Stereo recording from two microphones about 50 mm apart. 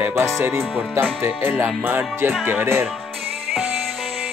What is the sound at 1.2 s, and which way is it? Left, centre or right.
Speech, right.